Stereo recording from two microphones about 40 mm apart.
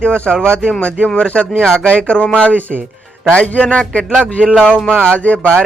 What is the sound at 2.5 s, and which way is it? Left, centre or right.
Speech, right.